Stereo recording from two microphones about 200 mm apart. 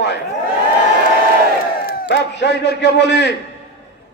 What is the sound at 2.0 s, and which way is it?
A man's voice, 60° left (ahead or behind).